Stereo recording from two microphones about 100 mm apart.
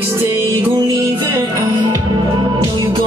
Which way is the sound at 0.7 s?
45° right (ahead or behind).